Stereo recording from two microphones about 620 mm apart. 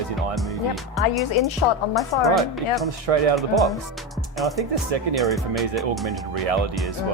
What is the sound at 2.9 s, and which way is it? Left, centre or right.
Speech, right.